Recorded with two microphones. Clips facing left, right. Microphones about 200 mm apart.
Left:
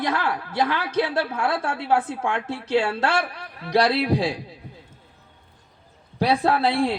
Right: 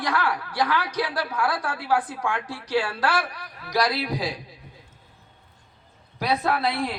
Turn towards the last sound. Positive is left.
turn(degrees=30)  # may be behind; listen again after turning